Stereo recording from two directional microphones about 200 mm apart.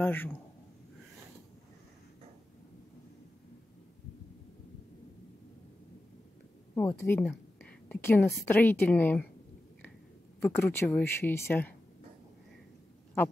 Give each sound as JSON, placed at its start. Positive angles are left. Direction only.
{"t": 0.0, "sound": "a woman's voice", "side_deg": 10}
{"t": 6.7, "sound": "a woman's voice", "side_deg": 15}
{"t": 10.4, "sound": "a woman's voice", "side_deg": 10}